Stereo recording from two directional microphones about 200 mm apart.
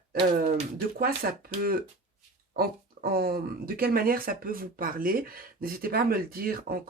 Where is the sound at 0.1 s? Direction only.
45° right (ahead or behind).